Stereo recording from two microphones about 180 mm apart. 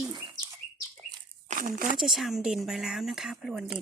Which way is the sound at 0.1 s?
25° right (ahead or behind).